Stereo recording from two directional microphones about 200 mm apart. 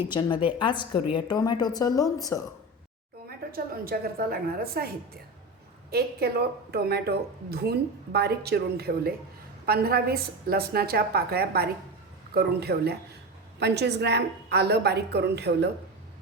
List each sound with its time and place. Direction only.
0.1 s a woman's voice: 25° left (ahead or behind)
3.2 s a woman's voice: 50° right (ahead or behind)
5.9 s a woman's voice: 50° right (ahead or behind)